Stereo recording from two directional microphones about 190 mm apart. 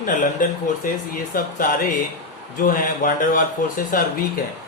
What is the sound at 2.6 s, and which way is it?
A man's voice, 45° left (ahead or behind).